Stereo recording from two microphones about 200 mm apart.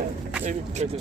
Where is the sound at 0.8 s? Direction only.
35° right (ahead or behind).